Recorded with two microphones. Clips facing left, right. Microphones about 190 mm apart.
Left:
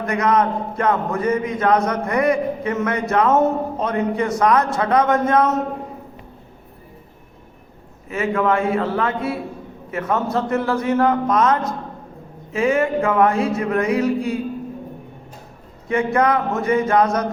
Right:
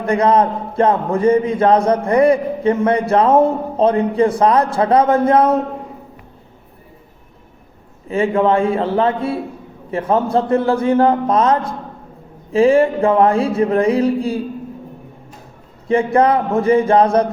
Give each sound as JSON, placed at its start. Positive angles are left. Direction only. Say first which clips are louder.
{"t": 0.0, "sound": "a man's voice", "louder": "right 4 dB", "side_deg": -30}
{"t": 8.0, "sound": "a man's voice", "louder": "right 5 dB", "side_deg": -30}
{"t": 15.9, "sound": "a man's voice", "louder": "right 4 dB", "side_deg": -30}